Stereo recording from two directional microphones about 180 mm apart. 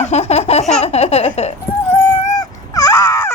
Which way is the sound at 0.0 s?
40° left (ahead or behind).